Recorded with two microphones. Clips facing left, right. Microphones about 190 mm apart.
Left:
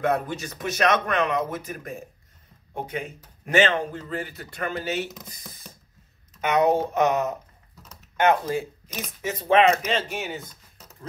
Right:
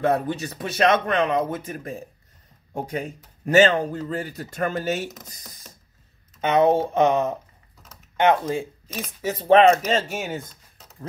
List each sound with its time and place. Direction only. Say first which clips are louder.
0.0 s speech: right 3 dB; 30° right (ahead or behind)
2.7 s speech: right 3 dB; 40° right (ahead or behind)
6.4 s speech: right 2 dB; 30° right (ahead or behind); by 10.4 s 45° right (ahead or behind)